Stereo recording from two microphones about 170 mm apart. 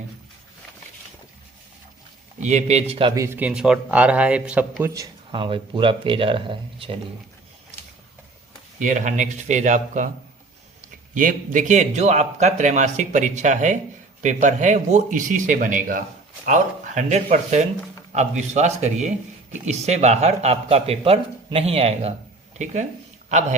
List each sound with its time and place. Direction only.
2.4 s speech: 40° right (ahead or behind)
3.2 s speech: 10° right (ahead or behind)
4.9 s speech: 25° right (ahead or behind)
8.8 s speech: 50° right (ahead or behind)